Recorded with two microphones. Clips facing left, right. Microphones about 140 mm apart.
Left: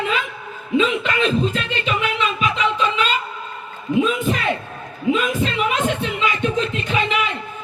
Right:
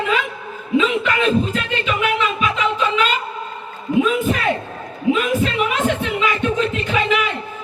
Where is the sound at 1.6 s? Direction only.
25° left (ahead or behind).